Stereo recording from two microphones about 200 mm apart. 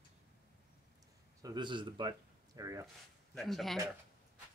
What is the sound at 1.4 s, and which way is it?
Speech, 20° right (ahead or behind).